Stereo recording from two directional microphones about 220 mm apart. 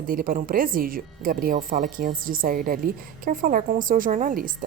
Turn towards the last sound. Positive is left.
turn(degrees=-40)  # may be behind; listen again after turning